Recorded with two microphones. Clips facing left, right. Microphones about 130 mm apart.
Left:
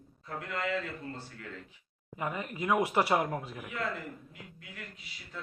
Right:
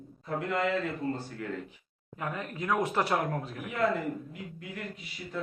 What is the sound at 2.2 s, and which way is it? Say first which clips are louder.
Speech: even; 5° left (ahead or behind).